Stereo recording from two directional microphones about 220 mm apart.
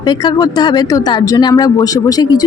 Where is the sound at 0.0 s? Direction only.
20° left (ahead or behind).